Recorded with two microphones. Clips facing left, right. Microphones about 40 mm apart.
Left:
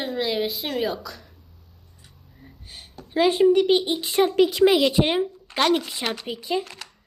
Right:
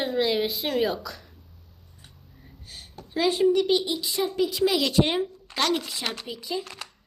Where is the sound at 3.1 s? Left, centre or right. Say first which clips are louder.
Left 4 dB; left.